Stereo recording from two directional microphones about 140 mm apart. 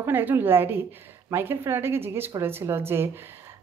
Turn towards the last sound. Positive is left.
turn(degrees=-15)  # may be behind; listen again after turning